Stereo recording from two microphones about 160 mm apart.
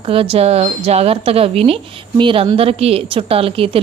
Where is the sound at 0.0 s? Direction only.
35° right (ahead or behind).